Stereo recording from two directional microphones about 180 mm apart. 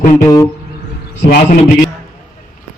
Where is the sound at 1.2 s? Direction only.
45° left (ahead or behind).